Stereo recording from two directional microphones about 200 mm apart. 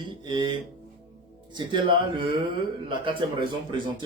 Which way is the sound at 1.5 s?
25° right (ahead or behind).